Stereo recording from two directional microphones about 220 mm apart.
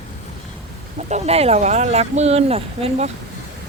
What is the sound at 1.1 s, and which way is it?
Speech, 30° right (ahead or behind).